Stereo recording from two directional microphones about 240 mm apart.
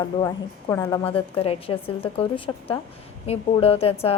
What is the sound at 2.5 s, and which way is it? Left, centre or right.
Speech, centre.